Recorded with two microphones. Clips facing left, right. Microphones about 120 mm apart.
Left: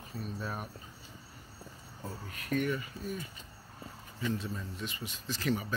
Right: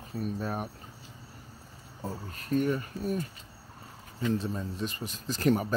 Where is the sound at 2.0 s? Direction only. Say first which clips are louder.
Right 5 dB; 30° right (ahead or behind).